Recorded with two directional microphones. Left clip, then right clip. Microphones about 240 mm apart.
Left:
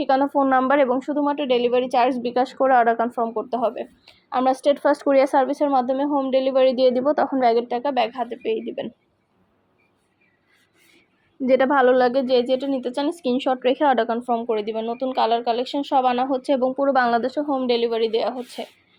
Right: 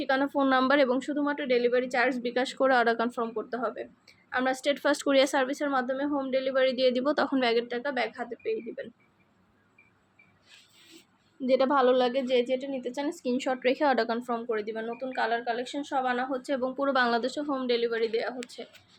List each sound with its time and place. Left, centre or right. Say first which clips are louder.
0.0 s speech: left 8 dB; centre
0.7 s speech: left 6 dB; centre
0.9 s speech: left 7 dB; centre
2.6 s speech: left 7 dB; centre
3.5 s speech: left 9 dB; centre
7.7 s speech: left 9 dB; centre
11.5 s speech: left 7 dB; centre
12.3 s speech: left 7 dB; centre
14.5 s speech: left 8 dB; centre
17.6 s speech: left 6 dB; centre